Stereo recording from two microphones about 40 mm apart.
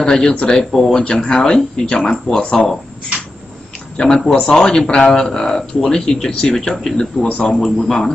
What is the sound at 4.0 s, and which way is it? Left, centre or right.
Speech, centre.